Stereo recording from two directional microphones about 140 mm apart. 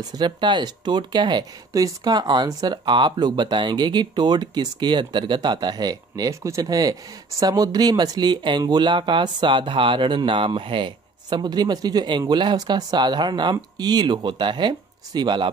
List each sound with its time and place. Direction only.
0.0 s speech: 30° right (ahead or behind)